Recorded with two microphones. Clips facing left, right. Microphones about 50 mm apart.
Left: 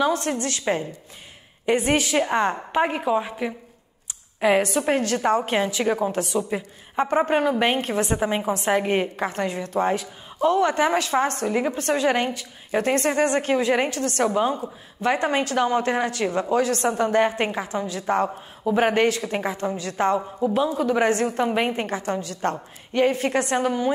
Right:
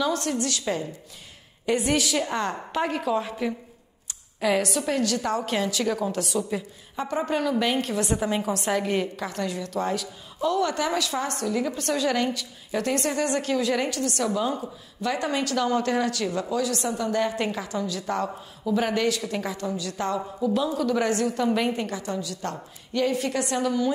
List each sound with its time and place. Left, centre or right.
0.0 s a woman's voice: left